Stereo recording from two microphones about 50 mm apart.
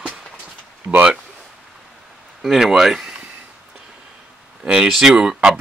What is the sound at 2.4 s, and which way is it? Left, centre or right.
Speech, centre.